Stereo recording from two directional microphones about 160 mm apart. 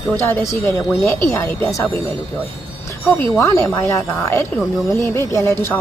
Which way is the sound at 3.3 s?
15° left (ahead or behind).